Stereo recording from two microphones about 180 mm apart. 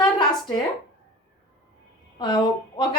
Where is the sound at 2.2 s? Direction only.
25° left (ahead or behind).